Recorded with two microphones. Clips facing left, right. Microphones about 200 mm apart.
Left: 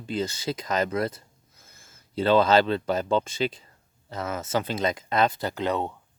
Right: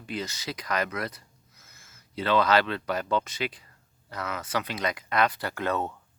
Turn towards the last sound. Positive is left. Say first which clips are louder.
# left 2 dB
turn(degrees=15)  # may be behind; listen again after turning